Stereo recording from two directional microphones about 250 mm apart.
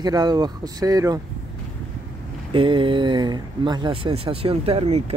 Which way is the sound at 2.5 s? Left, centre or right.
Right.